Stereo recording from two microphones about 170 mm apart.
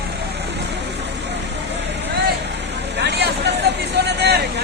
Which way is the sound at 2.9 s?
80° right.